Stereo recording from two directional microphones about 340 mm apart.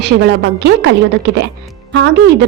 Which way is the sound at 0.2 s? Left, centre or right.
Right.